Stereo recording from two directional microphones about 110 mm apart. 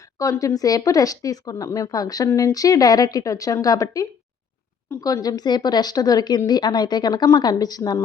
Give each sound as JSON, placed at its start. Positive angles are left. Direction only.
{"t": 0.2, "sound": "speech", "side_deg": 30}